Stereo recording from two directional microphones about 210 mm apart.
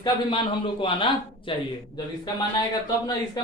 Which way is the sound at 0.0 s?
25° left (ahead or behind).